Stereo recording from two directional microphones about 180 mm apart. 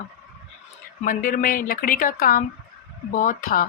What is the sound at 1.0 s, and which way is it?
Speech, 50° left (ahead or behind).